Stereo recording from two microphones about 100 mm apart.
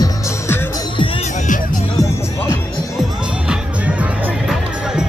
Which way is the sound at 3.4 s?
15° right (ahead or behind).